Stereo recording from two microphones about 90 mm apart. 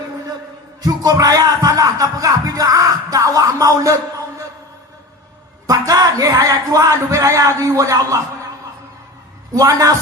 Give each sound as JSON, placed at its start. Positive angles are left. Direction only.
{"t": 0.8, "sound": "music", "side_deg": -45}
{"t": 5.6, "sound": "speech", "side_deg": -40}
{"t": 9.6, "sound": "a man's voice", "side_deg": -40}